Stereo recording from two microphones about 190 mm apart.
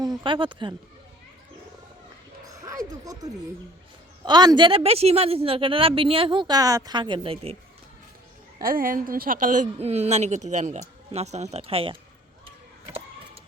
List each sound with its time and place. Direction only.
0.0 s speech: 20° right (ahead or behind)
2.6 s speech: 15° right (ahead or behind)
4.3 s speech: 20° right (ahead or behind)
8.6 s a woman's voice: 50° right (ahead or behind); by 11.9 s 30° right (ahead or behind)